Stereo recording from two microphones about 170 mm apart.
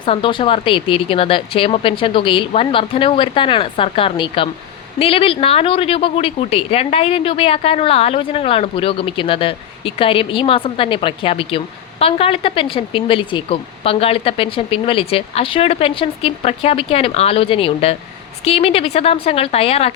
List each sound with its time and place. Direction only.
0.0 s speech: 30° left (ahead or behind)